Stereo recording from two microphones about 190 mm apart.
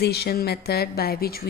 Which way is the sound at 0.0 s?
60° left (ahead or behind).